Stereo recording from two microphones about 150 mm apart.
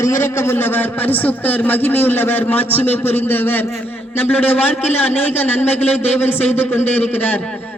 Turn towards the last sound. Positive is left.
turn(degrees=10)  # may be behind; listen again after turning